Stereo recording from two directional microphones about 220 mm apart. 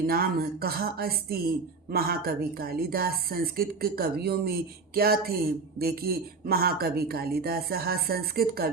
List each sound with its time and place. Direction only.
0.0 s speech: 45° right (ahead or behind)